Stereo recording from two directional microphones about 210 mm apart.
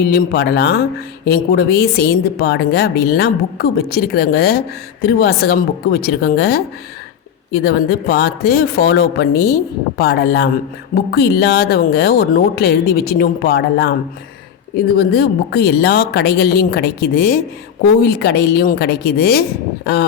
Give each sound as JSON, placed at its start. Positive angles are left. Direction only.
{"t": 0.0, "sound": "a woman's voice", "side_deg": 50}